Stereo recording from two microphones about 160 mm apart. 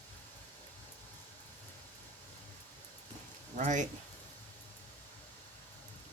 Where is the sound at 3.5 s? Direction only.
50° right (ahead or behind).